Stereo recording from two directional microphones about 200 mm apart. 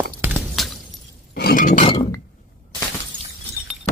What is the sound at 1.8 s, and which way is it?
Chink, 20° left (ahead or behind).